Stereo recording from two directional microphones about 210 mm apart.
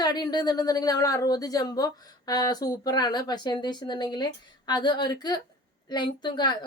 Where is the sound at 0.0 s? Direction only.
20° left (ahead or behind).